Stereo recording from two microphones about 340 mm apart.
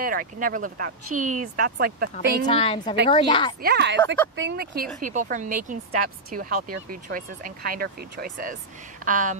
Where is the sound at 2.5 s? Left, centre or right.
Centre.